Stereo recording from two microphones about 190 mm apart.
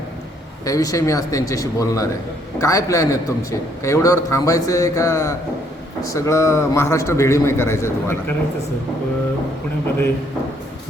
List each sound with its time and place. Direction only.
0.6 s a man's voice: 20° left (ahead or behind)